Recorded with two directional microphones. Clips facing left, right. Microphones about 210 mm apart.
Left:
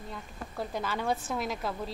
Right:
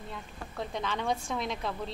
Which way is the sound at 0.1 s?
5° left (ahead or behind).